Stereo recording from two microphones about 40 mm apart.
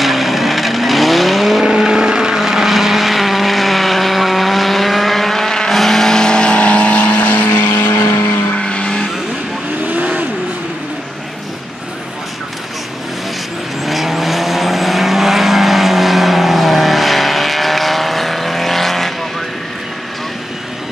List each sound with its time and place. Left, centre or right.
0.0 s vehicle: centre
1.6 s vehicle: centre; by 7.5 s left
7.5 s vehicle: left
8.5 s vehicle: left
9.8 s vehicle: right
13.8 s vehicle: centre